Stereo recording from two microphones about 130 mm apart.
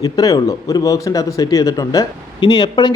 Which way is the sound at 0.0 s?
30° left (ahead or behind).